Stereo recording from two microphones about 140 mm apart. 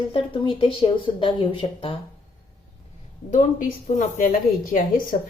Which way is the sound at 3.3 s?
70° left (ahead or behind).